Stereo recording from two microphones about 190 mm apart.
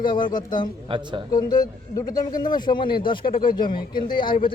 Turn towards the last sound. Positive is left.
turn(degrees=25)  # may be behind; listen again after turning